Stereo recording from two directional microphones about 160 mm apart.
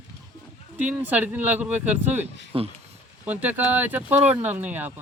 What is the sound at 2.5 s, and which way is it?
Speech, 35° right (ahead or behind).